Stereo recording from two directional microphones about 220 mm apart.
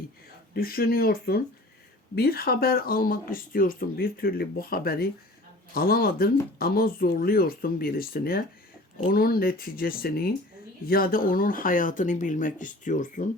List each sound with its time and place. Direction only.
0.5 s speech: 40° left (ahead or behind)